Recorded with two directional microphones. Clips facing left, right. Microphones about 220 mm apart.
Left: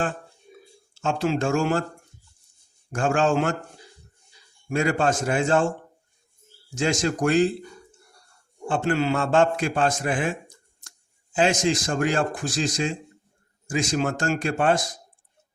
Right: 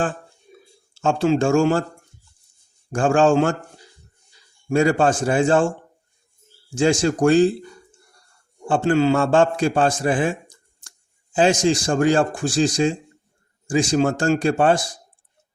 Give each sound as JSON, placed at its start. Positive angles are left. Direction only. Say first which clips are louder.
{"t": 1.0, "sound": "a man's voice", "louder": "right 6 dB", "side_deg": -30}
{"t": 3.0, "sound": "a man's voice", "louder": "right 5 dB", "side_deg": -30}
{"t": 4.7, "sound": "a man's voice", "louder": "right 5 dB", "side_deg": -30}
{"t": 6.7, "sound": "a man's voice", "louder": "right 6 dB", "side_deg": -30}
{"t": 8.6, "sound": "a man's voice", "louder": "right 6 dB", "side_deg": -30}
{"t": 11.3, "sound": "a man's voice", "louder": "right 4 dB", "side_deg": -30}